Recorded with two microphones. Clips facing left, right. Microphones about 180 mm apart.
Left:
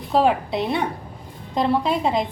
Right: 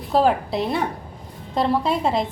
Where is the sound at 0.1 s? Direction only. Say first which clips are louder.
Even; centre (ahead or behind).